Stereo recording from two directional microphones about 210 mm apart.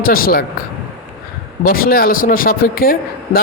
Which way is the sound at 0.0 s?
45° left (ahead or behind).